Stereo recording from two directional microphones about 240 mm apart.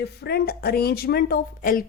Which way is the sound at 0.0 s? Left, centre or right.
Left.